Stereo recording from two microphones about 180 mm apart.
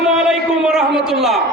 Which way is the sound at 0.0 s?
5° right (ahead or behind).